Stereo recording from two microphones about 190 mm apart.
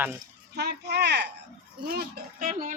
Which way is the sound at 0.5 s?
60° right (ahead or behind).